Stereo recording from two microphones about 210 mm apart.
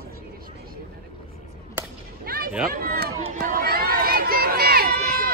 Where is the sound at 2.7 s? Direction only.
45° right (ahead or behind).